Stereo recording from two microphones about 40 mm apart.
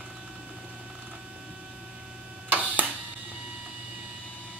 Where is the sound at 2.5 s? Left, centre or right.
Right.